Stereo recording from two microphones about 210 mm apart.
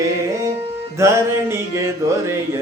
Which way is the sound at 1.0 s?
15° right (ahead or behind).